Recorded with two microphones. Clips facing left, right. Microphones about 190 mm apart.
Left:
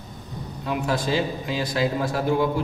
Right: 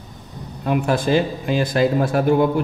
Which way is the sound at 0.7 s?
55° right (ahead or behind).